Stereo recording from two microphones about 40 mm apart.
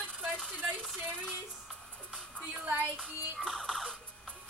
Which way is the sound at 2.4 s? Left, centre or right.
Right.